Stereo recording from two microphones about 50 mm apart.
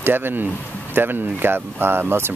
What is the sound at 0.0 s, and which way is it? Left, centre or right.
Speech, right.